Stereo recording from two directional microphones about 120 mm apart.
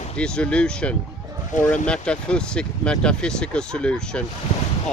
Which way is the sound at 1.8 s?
10° left (ahead or behind).